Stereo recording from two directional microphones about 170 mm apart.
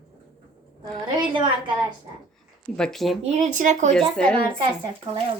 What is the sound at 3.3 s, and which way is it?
Speech, 45° right (ahead or behind).